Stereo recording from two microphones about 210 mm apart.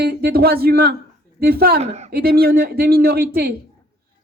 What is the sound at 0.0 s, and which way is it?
A woman's voice, 50° right (ahead or behind).